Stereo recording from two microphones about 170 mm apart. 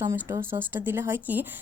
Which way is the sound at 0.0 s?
15° right (ahead or behind).